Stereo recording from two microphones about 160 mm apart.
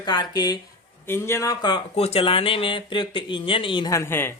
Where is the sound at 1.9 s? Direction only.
40° left (ahead or behind); by 4.4 s 15° left (ahead or behind).